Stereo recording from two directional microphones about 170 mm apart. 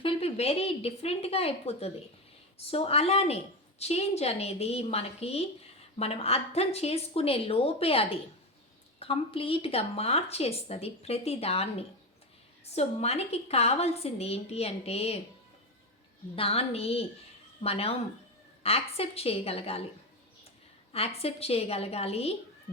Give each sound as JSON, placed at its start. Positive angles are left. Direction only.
{"t": 0.0, "sound": "speech", "side_deg": 35}
{"t": 16.3, "sound": "speech", "side_deg": 35}
{"t": 20.9, "sound": "speech", "side_deg": 35}